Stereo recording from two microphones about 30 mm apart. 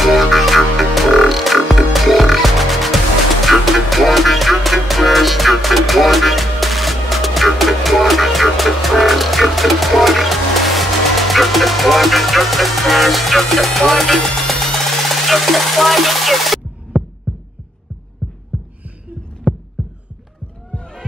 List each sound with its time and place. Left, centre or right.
0.0 s music: centre
17.0 s heart sounds: right
19.5 s heart sounds: right
20.7 s a sound: left